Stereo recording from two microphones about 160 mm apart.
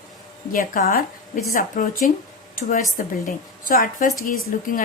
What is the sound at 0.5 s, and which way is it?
A woman's voice, 55° left (ahead or behind).